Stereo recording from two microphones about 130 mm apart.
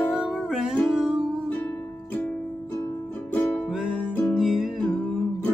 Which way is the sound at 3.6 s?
5° right (ahead or behind).